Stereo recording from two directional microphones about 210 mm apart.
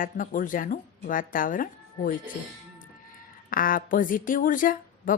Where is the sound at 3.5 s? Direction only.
40° left (ahead or behind).